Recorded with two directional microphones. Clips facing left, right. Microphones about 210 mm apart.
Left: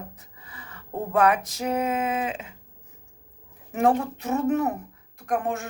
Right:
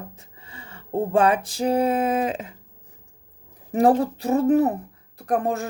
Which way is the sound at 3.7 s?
35° right (ahead or behind).